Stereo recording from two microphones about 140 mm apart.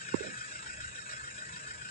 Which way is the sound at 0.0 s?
90° left.